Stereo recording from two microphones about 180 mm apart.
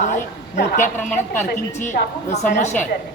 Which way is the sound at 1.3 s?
45° left (ahead or behind).